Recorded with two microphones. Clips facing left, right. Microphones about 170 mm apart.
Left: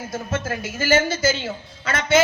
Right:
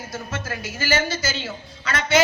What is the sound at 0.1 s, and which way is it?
A man's voice, 50° left (ahead or behind).